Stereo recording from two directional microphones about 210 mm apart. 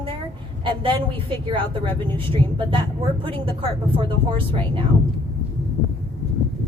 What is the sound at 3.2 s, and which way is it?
Speech, 25° right (ahead or behind).